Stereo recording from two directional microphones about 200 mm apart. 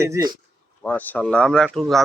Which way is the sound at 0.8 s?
5° left (ahead or behind).